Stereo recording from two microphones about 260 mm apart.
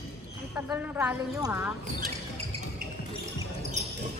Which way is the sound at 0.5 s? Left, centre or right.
Centre.